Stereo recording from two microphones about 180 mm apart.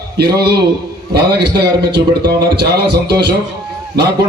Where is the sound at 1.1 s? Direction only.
65° right (ahead or behind).